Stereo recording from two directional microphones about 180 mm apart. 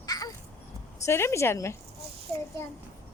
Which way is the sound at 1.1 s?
15° left (ahead or behind).